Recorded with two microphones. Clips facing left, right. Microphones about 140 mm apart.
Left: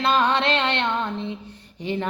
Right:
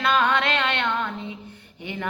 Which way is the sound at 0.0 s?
30° left (ahead or behind).